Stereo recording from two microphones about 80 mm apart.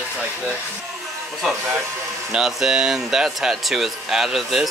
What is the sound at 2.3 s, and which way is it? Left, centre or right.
A man's voice, centre.